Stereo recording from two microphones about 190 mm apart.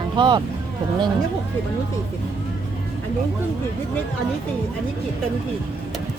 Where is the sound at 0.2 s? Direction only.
25° right (ahead or behind).